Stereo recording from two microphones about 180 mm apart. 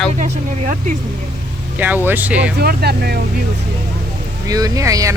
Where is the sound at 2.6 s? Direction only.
60° right (ahead or behind).